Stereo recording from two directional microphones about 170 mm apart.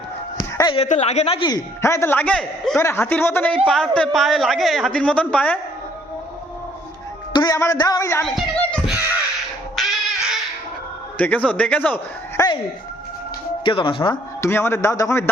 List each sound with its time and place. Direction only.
0.7 s a man's voice: 40° left (ahead or behind); by 5.5 s 5° left (ahead or behind)
7.3 s a man's voice: 20° left (ahead or behind)
8.2 s music: centre (ahead or behind)
9.7 s dog: centre (ahead or behind)
11.2 s speech: 10° left (ahead or behind)
13.7 s a man's voice: 30° left (ahead or behind)
14.4 s speech: 15° left (ahead or behind)